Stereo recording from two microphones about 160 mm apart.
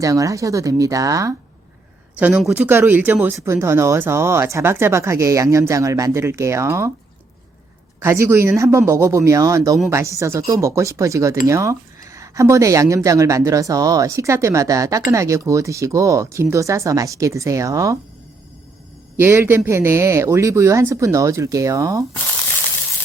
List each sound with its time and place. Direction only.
0.0 s speech: 20° right (ahead or behind)
2.1 s speech: 5° right (ahead or behind)
7.9 s speech: 15° right (ahead or behind)
19.1 s speech: 15° right (ahead or behind)